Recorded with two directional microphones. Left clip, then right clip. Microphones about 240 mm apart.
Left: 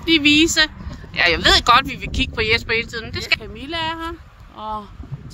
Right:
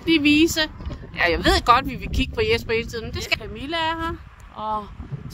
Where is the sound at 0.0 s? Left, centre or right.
Centre.